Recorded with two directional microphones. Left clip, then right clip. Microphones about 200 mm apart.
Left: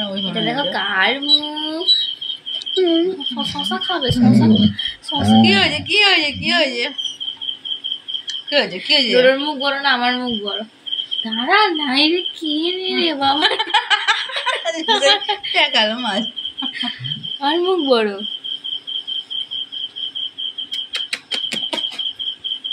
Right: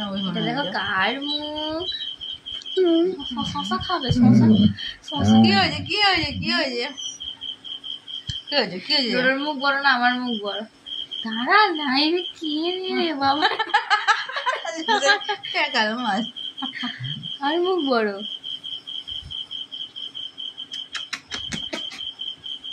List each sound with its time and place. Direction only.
0.3 s speech: 10° right (ahead or behind)
5.4 s speech: 25° right (ahead or behind)
8.5 s speech: 25° right (ahead or behind)
9.2 s speech: 10° right (ahead or behind)
13.6 s laughter: 25° right (ahead or behind)
14.9 s speech: 10° right (ahead or behind)
15.5 s a woman's voice: 25° right (ahead or behind)
17.4 s speech: 10° right (ahead or behind)